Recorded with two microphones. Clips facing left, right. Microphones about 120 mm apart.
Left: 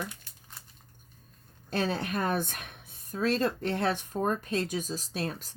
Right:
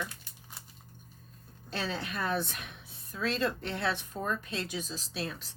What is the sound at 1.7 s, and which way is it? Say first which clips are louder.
A woman's voice: left 6 dB; 45° left (ahead or behind).